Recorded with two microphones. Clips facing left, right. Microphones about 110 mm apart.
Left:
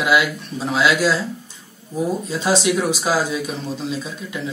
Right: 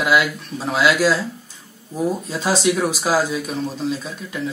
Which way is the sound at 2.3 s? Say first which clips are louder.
Left 2 dB; centre (ahead or behind).